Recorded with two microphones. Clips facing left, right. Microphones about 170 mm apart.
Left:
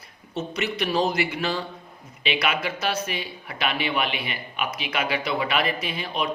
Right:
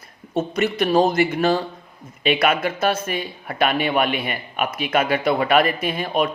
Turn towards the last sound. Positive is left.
turn(degrees=-50)  # may be behind; listen again after turning